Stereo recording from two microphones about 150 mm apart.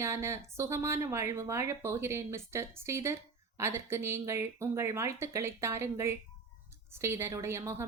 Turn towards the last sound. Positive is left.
turn(degrees=-20)  # may be behind; listen again after turning